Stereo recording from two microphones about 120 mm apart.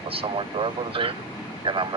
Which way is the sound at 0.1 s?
50° right (ahead or behind).